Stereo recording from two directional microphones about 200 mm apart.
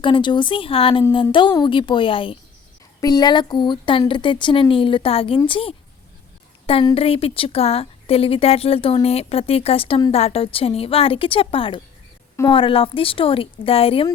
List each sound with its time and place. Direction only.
0.0 s a woman's voice: 25° left (ahead or behind)